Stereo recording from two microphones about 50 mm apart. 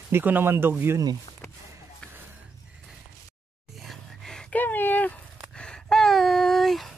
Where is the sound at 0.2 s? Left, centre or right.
Right.